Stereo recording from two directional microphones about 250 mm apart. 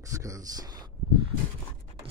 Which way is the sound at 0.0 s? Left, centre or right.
Centre.